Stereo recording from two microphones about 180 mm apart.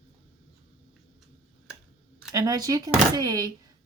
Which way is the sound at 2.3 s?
20° right (ahead or behind).